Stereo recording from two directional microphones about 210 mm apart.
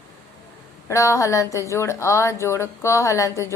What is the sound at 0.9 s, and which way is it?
Speech, 15° left (ahead or behind).